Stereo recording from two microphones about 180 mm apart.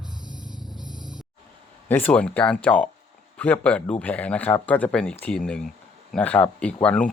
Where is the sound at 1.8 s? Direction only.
10° left (ahead or behind).